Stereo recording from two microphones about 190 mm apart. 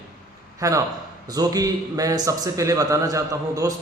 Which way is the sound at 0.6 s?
20° right (ahead or behind).